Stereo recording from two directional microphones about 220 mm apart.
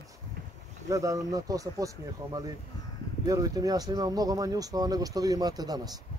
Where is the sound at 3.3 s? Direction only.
15° right (ahead or behind).